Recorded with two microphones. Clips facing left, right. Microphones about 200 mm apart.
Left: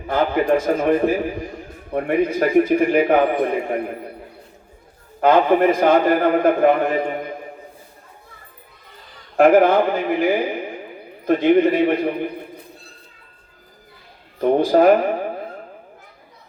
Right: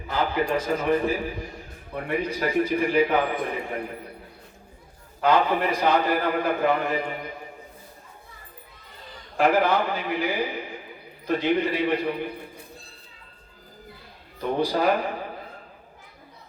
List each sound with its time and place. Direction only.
0.1 s a man's voice: 50° left (ahead or behind)
5.2 s a man's voice: 50° left (ahead or behind)
9.4 s a man's voice: 50° left (ahead or behind)
14.4 s a man's voice: 50° left (ahead or behind)